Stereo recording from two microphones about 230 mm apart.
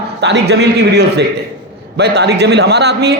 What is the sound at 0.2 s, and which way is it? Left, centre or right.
A man's voice, right.